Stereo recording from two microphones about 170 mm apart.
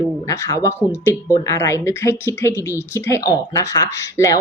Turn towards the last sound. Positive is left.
turn(degrees=20)  # may be behind; listen again after turning